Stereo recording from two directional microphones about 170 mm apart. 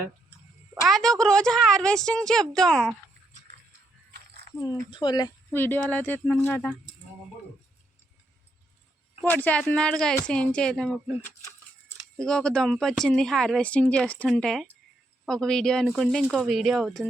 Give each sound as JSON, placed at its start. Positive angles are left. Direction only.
{"t": 0.9, "sound": "speech", "side_deg": 5}
{"t": 4.6, "sound": "speech", "side_deg": 20}
{"t": 5.5, "sound": "speech", "side_deg": 10}
{"t": 9.3, "sound": "speech", "side_deg": 10}
{"t": 12.1, "sound": "speech", "side_deg": 5}